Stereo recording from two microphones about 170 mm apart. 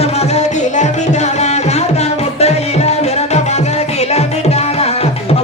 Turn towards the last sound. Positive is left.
turn(degrees=40)  # may be behind; listen again after turning